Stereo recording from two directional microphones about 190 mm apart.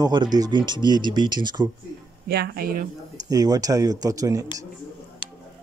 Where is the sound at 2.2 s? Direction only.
60° right (ahead or behind).